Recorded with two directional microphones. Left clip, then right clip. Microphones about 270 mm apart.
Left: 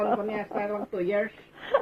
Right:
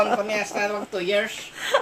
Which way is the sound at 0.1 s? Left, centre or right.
Centre.